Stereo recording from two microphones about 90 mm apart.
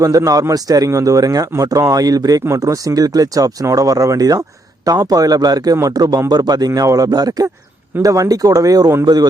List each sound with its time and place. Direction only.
0.0 s a man's voice: 40° right (ahead or behind)